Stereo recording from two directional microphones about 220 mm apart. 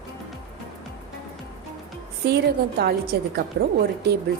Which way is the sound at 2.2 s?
45° right (ahead or behind).